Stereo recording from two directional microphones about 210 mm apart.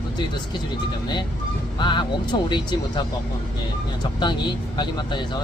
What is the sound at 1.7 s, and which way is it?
Speech, 20° left (ahead or behind).